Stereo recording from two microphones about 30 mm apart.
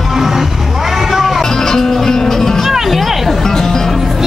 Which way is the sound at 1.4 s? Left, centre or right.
Centre.